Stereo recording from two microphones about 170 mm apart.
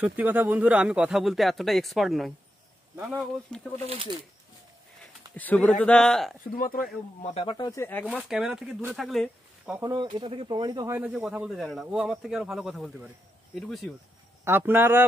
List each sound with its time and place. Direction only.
0.0 s speech: 10° right (ahead or behind); by 3.6 s 5° left (ahead or behind)
3.8 s speech: 30° right (ahead or behind)
5.3 s speech: 10° left (ahead or behind)
6.4 s speech: 55° left (ahead or behind)
7.2 s speech: 40° left (ahead or behind); by 8.1 s 10° left (ahead or behind)
8.3 s speech: 5° right (ahead or behind)
9.8 s speech: 25° right (ahead or behind)
11.0 s speech: 5° right (ahead or behind)
14.4 s a man's voice: 10° right (ahead or behind)